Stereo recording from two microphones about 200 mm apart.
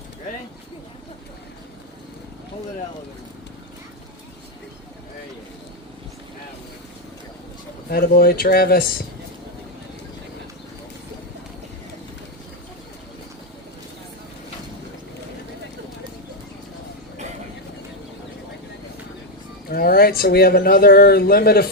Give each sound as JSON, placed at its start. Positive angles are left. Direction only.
{"t": 7.9, "sound": "speech", "side_deg": 45}
{"t": 19.7, "sound": "speech", "side_deg": 50}